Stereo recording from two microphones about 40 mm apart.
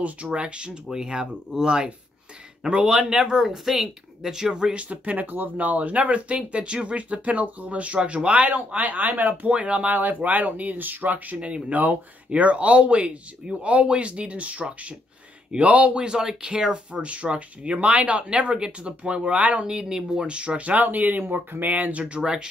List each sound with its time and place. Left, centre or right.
0.0 s speech: right
4.7 s speech: right
9.5 s speech: right
9.9 s speech: right
11.3 s speech: right
16.2 s speech: centre; by 19.6 s right
19.6 s speech: right
22.0 s speech: right